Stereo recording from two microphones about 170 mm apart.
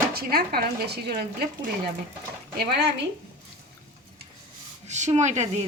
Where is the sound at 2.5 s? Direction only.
75° right (ahead or behind).